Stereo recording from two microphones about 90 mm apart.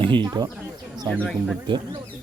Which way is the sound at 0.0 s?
65° right (ahead or behind).